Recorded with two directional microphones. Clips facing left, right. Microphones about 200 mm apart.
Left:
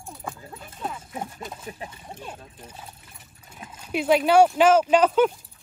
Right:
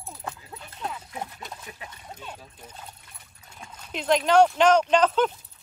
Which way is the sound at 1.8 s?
25° left (ahead or behind).